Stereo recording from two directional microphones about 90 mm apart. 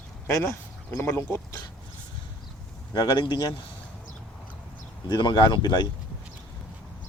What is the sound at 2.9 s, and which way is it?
Speech, 55° left (ahead or behind).